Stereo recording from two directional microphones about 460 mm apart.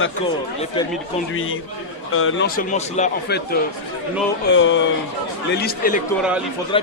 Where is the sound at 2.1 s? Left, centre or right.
Left.